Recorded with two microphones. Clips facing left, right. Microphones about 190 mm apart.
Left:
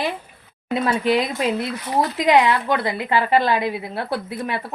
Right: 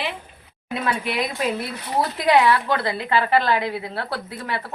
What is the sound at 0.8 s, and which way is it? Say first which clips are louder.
A woman's voice: left 5 dB; 25° left (ahead or behind).